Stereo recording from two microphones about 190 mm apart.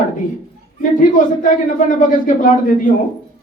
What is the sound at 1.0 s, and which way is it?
Speech, 45° left (ahead or behind).